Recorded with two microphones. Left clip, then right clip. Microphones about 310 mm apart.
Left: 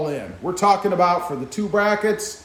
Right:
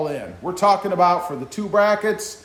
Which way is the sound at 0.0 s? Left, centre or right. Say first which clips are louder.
Even; centre.